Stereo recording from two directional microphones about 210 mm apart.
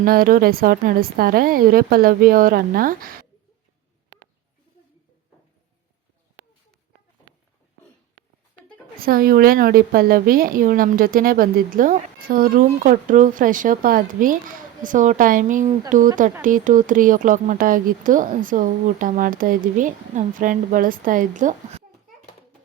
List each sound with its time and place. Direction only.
0.0 s a woman's voice: 45° right (ahead or behind)
9.0 s a woman's voice: 45° right (ahead or behind)